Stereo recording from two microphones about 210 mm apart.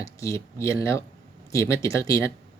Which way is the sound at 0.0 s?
15° left (ahead or behind).